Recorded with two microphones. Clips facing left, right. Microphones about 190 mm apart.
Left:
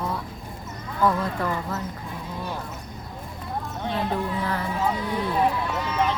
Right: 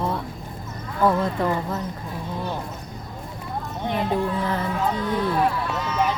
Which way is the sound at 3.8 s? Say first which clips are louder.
Right 4 dB; 15° right (ahead or behind).